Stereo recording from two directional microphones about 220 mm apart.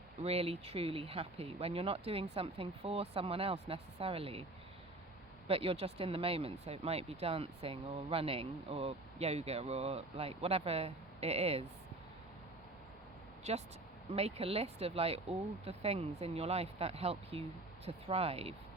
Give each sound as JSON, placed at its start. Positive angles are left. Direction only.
{"t": 0.2, "sound": "speech", "side_deg": -25}
{"t": 5.5, "sound": "speech", "side_deg": -25}
{"t": 13.5, "sound": "speech", "side_deg": -30}